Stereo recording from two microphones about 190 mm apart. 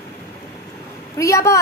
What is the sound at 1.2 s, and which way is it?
Speech, 15° left (ahead or behind).